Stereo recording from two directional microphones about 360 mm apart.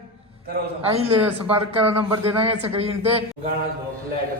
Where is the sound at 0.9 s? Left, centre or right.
Centre.